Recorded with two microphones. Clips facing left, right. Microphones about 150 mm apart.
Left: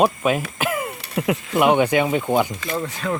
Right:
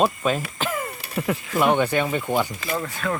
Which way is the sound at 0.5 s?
15° left (ahead or behind).